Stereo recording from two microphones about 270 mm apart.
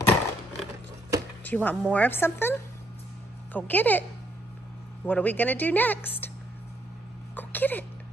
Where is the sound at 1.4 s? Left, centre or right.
Centre.